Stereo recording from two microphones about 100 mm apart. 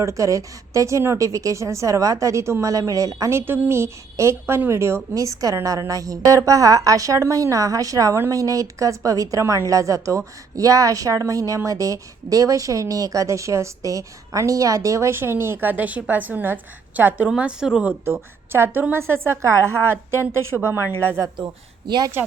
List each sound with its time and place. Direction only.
0.0 s a woman's voice: 30° right (ahead or behind); by 17.9 s 10° right (ahead or behind)
18.0 s a woman's voice: 25° right (ahead or behind)
21.8 s speech: 45° right (ahead or behind)